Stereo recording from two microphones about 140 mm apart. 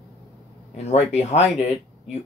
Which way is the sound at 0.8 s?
50° left (ahead or behind).